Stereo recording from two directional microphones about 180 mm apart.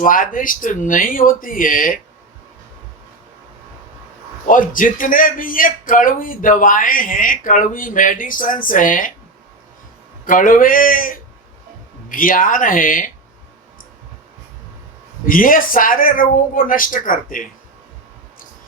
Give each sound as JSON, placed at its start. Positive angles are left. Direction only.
{"t": 0.0, "sound": "a man's voice", "side_deg": 50}
{"t": 4.4, "sound": "a man's voice", "side_deg": 50}
{"t": 10.2, "sound": "a man's voice", "side_deg": 50}
{"t": 15.3, "sound": "a man's voice", "side_deg": 50}